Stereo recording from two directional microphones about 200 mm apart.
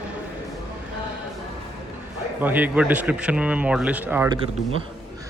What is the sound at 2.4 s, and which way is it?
Speech, 10° right (ahead or behind).